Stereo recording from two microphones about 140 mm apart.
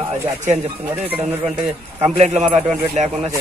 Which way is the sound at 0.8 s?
15° right (ahead or behind).